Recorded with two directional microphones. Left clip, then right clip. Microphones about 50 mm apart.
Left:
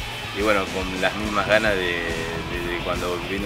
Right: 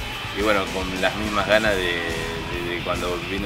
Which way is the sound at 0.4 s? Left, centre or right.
Centre.